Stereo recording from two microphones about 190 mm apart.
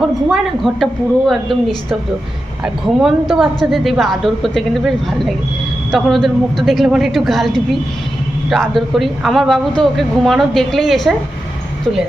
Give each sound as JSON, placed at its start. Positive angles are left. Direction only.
{"t": 0.3, "sound": "speech", "side_deg": 0}